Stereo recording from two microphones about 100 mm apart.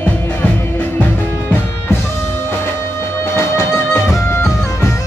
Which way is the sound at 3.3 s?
25° left (ahead or behind).